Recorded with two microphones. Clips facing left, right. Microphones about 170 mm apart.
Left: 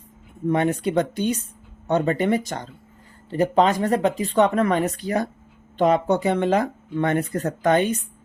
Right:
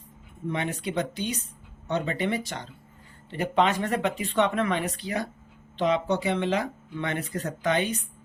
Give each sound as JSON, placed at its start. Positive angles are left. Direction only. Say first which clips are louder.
{"t": 0.4, "sound": "speech", "louder": "left 9 dB", "side_deg": 50}